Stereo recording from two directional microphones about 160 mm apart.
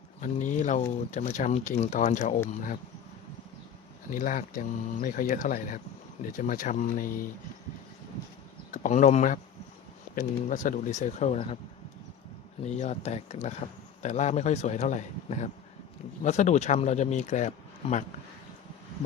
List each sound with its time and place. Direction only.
0.2 s speech: 50° left (ahead or behind)
4.1 s speech: 55° left (ahead or behind)
8.7 s speech: 50° left (ahead or behind)
12.6 s speech: 45° left (ahead or behind)